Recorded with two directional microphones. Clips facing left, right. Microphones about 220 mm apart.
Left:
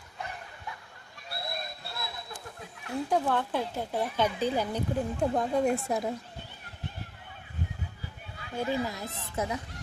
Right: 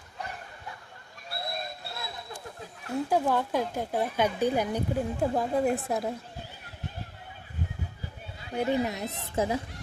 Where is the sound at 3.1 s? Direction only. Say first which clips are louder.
Right 2 dB; 10° right (ahead or behind).